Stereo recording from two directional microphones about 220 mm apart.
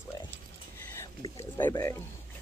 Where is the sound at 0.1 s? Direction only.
15° left (ahead or behind).